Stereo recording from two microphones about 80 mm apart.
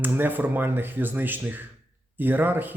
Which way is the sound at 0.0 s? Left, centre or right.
Right.